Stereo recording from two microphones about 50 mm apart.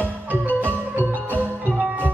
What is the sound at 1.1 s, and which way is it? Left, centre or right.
Music, left.